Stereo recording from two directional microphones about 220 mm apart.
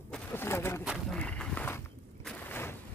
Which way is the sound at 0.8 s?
Centre (ahead or behind).